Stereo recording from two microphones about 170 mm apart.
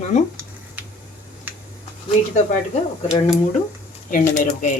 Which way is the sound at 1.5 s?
10° right (ahead or behind).